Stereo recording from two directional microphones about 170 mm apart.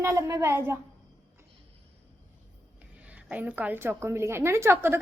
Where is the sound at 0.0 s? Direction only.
20° right (ahead or behind).